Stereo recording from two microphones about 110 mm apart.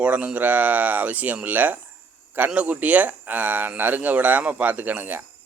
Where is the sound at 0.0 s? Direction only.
10° right (ahead or behind).